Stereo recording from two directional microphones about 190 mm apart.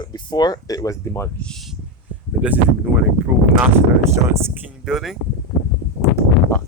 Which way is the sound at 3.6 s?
15° right (ahead or behind).